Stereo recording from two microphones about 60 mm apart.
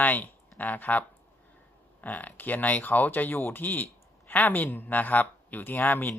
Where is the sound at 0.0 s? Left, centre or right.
Left.